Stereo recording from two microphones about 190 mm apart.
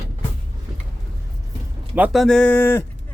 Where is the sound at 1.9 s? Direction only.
5° right (ahead or behind).